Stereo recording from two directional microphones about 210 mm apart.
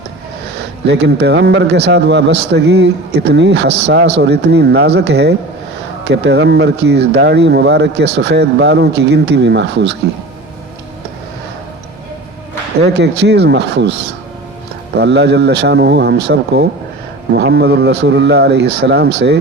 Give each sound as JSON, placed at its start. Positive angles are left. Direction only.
{"t": 0.6, "sound": "speech", "side_deg": -55}
{"t": 13.0, "sound": "speech", "side_deg": -55}
{"t": 14.9, "sound": "speech", "side_deg": -55}